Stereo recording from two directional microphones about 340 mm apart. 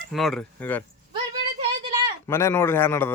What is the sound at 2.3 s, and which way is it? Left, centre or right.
Speech, centre.